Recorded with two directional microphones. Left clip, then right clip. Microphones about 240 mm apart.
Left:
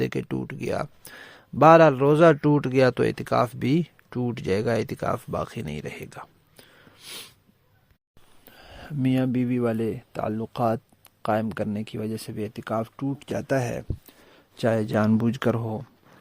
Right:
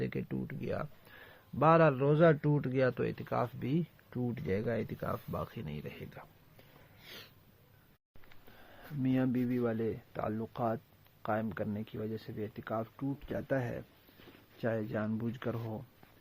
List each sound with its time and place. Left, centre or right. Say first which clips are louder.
0.0 s speech: left 11 dB; left
9.0 s speech: left 8 dB; left